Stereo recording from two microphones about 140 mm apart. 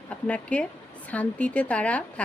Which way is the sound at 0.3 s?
10° left (ahead or behind).